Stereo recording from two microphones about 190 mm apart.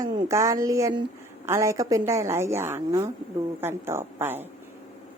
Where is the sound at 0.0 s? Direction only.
15° right (ahead or behind).